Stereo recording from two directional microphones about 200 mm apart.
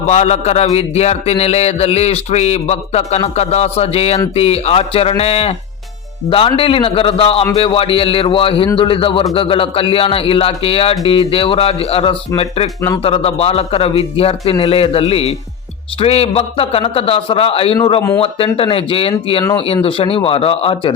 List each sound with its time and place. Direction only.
0.1 s a man's voice: 35° left (ahead or behind)